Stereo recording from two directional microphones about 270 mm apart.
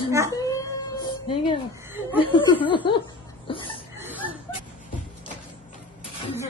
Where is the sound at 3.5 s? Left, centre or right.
Centre.